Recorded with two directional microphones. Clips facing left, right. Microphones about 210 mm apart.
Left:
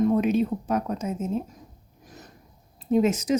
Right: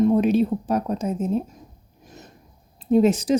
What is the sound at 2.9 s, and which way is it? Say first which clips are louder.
Speech: right 4 dB; 30° right (ahead or behind).